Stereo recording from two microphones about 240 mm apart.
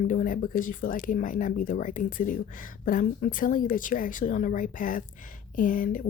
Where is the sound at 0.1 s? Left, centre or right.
Left.